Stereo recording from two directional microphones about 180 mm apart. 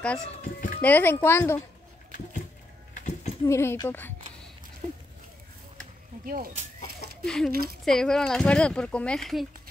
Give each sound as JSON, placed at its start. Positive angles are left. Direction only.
{"t": 0.4, "sound": "speech", "side_deg": 50}
{"t": 0.7, "sound": "speech", "side_deg": 10}
{"t": 2.9, "sound": "a sound", "side_deg": 40}
{"t": 3.4, "sound": "speech", "side_deg": 15}
{"t": 4.8, "sound": "a sound", "side_deg": -40}
{"t": 6.2, "sound": "speech", "side_deg": -50}
{"t": 7.2, "sound": "speech", "side_deg": 5}